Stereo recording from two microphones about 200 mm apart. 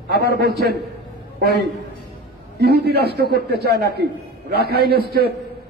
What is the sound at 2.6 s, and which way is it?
A man's voice, 55° right (ahead or behind).